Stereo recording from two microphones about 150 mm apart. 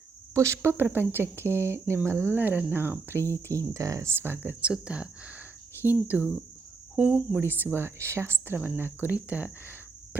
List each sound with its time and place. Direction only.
0.3 s speech: 20° right (ahead or behind)